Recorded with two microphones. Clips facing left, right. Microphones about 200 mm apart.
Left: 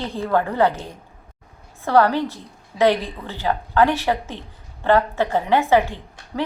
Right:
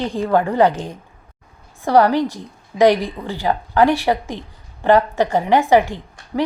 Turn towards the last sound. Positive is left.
turn(degrees=-15)  # may be behind; listen again after turning